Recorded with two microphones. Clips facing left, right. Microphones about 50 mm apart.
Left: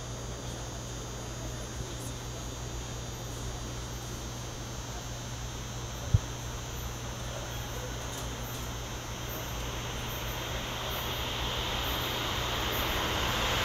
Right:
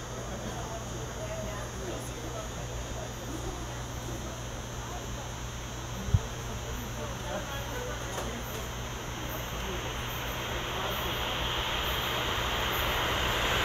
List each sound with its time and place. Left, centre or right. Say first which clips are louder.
10.3 s vehicle: right 3 dB; right